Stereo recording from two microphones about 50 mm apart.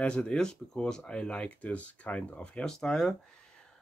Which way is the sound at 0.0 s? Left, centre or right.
Centre.